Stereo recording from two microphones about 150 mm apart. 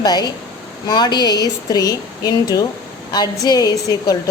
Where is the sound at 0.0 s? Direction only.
25° left (ahead or behind).